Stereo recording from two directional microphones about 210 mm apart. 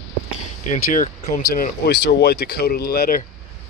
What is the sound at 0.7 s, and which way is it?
Speech, 40° left (ahead or behind).